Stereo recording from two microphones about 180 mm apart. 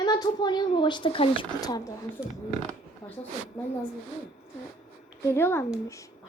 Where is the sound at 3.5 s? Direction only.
10° left (ahead or behind).